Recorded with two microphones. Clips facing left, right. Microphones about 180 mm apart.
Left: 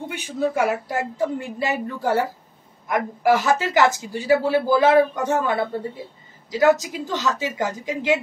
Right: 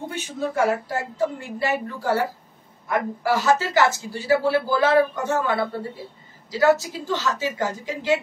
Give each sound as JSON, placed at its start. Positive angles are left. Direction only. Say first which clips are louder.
{"t": 0.1, "sound": "speech", "louder": "left 5 dB", "side_deg": 15}